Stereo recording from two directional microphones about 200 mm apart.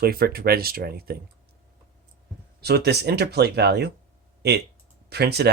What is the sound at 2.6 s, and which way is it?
Speech, 55° right (ahead or behind).